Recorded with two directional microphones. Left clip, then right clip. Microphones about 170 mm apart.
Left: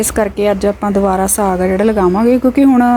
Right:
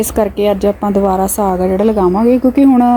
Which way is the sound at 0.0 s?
15° right (ahead or behind).